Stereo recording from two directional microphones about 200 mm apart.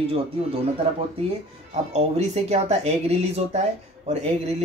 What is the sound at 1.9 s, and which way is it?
Speech, 30° right (ahead or behind).